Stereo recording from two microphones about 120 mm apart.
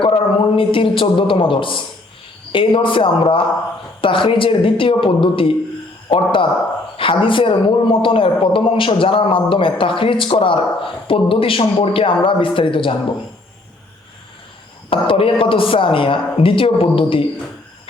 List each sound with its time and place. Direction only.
0.0 s a man's voice: 50° left (ahead or behind)
14.8 s a man's voice: 50° left (ahead or behind)